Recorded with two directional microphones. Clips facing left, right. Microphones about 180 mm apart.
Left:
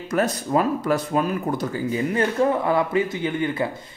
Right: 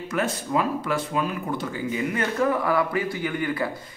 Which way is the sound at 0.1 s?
40° left (ahead or behind).